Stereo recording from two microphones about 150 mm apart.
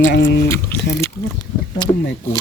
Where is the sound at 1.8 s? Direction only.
30° left (ahead or behind).